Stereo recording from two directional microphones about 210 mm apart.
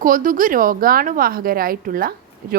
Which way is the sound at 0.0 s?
40° right (ahead or behind).